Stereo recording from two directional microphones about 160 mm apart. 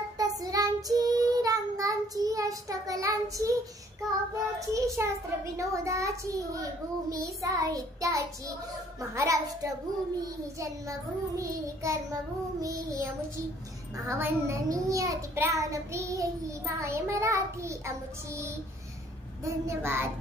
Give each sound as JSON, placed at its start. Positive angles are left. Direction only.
{"t": 0.2, "sound": "child singing", "side_deg": -25}
{"t": 4.6, "sound": "a child's voice", "side_deg": -20}